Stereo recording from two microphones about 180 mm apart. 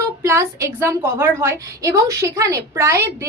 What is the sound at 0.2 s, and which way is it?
A woman's voice, 15° right (ahead or behind).